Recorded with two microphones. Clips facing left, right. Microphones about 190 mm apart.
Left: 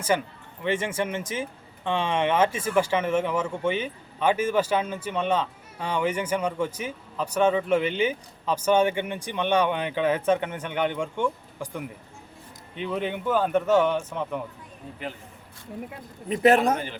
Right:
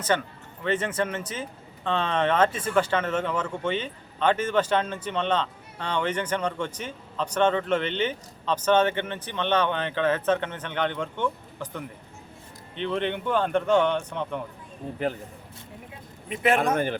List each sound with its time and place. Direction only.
0.1 s a man's voice: 10° left (ahead or behind)
16.3 s a man's voice: 40° left (ahead or behind)
16.7 s speech: 50° right (ahead or behind)